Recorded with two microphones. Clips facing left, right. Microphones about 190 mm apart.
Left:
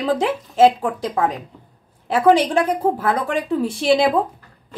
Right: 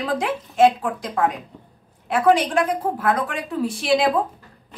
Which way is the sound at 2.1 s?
30° left (ahead or behind).